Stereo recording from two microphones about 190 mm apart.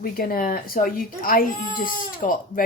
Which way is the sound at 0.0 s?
50° left (ahead or behind).